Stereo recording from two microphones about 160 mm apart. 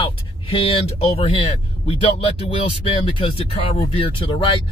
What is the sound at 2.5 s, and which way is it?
Speech, 35° left (ahead or behind).